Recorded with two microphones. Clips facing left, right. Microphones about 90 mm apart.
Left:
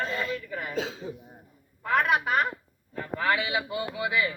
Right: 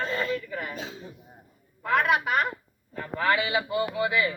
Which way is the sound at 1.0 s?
90° left.